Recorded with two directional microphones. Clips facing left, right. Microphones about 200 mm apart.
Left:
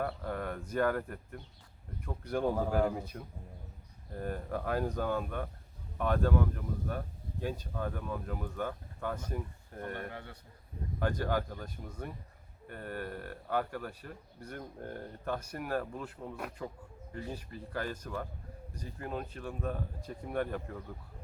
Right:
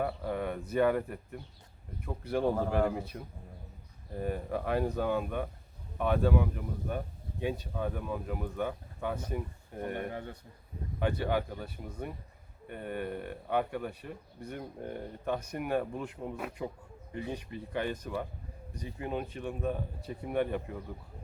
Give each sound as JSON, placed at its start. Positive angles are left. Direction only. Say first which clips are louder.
{"t": 0.0, "sound": "speech", "louder": "right 3 dB", "side_deg": -5}
{"t": 16.6, "sound": "a sound", "louder": "right 3 dB", "side_deg": -10}
{"t": 17.7, "sound": "speech", "louder": "right 4 dB", "side_deg": -15}